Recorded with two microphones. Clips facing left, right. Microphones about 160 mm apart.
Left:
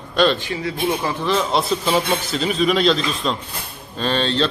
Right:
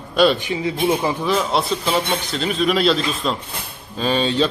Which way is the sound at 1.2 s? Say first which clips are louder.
Left 2 dB; centre (ahead or behind).